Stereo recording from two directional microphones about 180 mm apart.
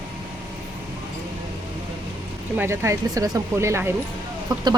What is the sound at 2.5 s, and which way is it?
A woman's voice, 15° right (ahead or behind).